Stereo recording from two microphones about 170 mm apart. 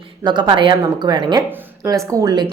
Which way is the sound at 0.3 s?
25° right (ahead or behind).